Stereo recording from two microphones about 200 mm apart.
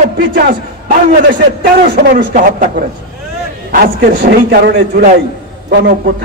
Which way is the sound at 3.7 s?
50° right (ahead or behind).